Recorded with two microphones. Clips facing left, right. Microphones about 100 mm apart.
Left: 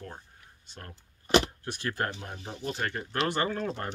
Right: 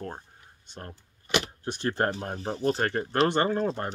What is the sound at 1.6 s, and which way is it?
Speech, 25° right (ahead or behind).